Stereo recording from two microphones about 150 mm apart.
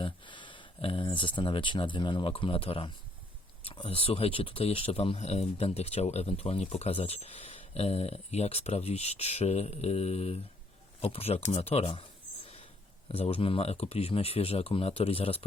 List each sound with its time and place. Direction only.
0.0 s speech: 35° left (ahead or behind)
13.1 s speech: 40° left (ahead or behind)